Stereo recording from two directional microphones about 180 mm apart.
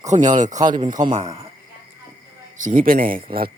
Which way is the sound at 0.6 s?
25° right (ahead or behind).